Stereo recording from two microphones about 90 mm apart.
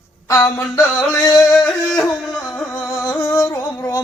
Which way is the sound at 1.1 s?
40° left (ahead or behind).